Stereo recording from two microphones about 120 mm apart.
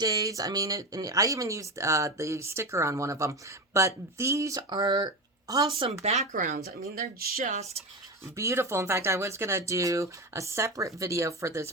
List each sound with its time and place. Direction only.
0.0 s speech: 30° right (ahead or behind)
5.8 s speech: 65° right (ahead or behind); by 6.6 s 90° right
7.4 s speech: 75° right (ahead or behind)
8.4 s speech: 25° right (ahead or behind)